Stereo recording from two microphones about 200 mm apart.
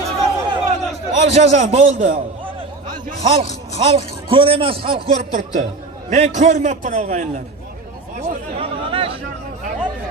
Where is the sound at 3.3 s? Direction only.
30° right (ahead or behind).